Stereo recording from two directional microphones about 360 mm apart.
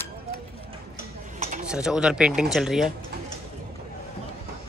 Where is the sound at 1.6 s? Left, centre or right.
Centre.